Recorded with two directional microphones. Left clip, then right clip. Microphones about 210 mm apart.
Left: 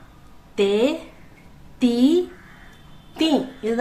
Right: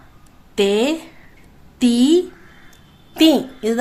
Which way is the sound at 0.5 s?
45° right (ahead or behind).